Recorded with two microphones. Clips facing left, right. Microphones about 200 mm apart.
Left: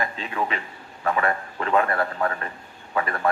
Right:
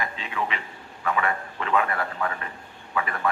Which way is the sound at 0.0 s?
40° left (ahead or behind).